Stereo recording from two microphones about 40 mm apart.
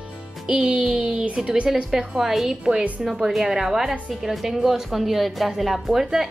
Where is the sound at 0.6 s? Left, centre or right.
Centre.